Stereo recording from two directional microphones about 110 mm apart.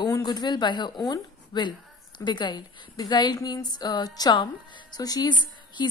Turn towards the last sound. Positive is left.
turn(degrees=40)  # may be behind; listen again after turning